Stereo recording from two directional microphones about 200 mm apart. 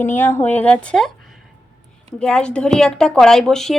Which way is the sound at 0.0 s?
10° left (ahead or behind).